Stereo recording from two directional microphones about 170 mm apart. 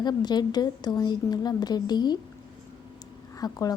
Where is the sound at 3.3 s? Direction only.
20° left (ahead or behind).